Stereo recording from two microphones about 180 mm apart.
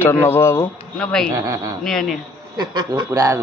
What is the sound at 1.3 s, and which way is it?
Speech, 15° right (ahead or behind).